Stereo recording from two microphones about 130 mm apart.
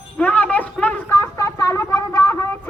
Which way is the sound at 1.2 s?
25° left (ahead or behind).